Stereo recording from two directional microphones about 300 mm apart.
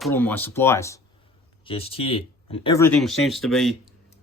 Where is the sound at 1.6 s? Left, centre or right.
Centre.